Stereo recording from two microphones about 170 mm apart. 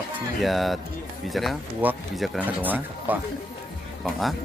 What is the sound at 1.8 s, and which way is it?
Speech, 10° right (ahead or behind).